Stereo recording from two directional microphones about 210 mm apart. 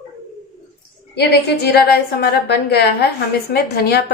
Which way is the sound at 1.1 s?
50° left (ahead or behind).